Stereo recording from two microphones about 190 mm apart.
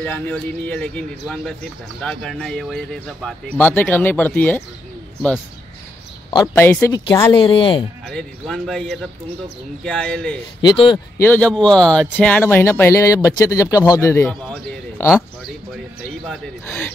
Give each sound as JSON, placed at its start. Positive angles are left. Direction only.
{"t": 0.0, "sound": "speech", "side_deg": 10}
{"t": 6.4, "sound": "speech", "side_deg": 10}
{"t": 8.1, "sound": "speech", "side_deg": 0}
{"t": 10.7, "sound": "speech", "side_deg": 25}
{"t": 11.1, "sound": "speech", "side_deg": 10}
{"t": 16.3, "sound": "speech", "side_deg": 5}